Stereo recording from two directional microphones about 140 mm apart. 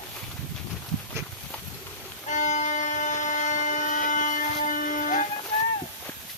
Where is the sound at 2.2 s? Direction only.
60° left (ahead or behind).